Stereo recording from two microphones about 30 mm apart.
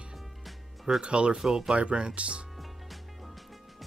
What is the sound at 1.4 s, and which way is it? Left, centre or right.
Speech, centre.